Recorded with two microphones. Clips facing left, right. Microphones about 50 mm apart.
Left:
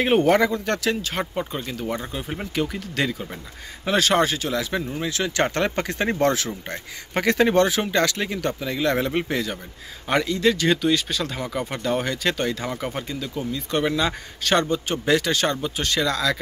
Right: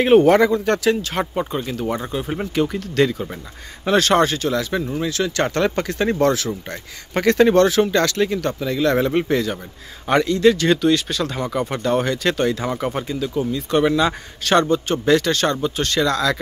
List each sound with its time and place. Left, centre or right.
0.0 s speech: centre
3.8 s speech: centre
5.0 s speech: centre
6.7 s speech: centre
14.9 s speech: centre